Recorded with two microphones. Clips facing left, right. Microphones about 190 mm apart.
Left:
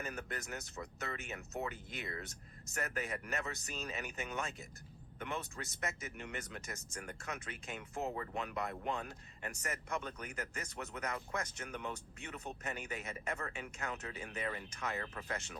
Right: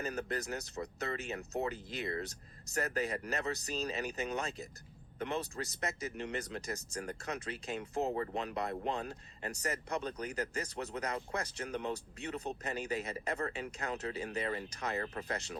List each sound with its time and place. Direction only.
0.0 s speech: 35° right (ahead or behind)